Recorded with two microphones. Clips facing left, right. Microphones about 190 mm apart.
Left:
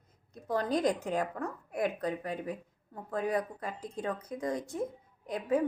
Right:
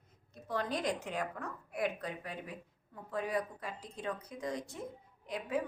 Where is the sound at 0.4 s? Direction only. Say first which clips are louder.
Left 6 dB; 40° left (ahead or behind).